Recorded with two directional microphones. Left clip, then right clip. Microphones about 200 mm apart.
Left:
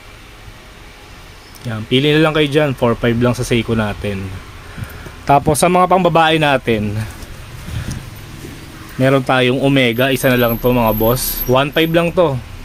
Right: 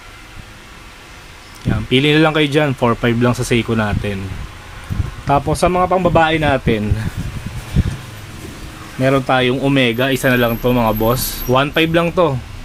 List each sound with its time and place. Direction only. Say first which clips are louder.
1.7 s speech: even; centre (ahead or behind)
5.2 s a man's voice: left 3 dB; 15° left (ahead or behind)
9.0 s speech: left 1 dB; 15° left (ahead or behind)